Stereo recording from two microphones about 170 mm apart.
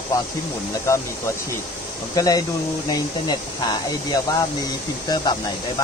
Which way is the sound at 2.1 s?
20° left (ahead or behind).